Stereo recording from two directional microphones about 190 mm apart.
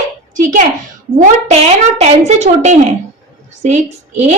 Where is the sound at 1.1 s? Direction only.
40° right (ahead or behind).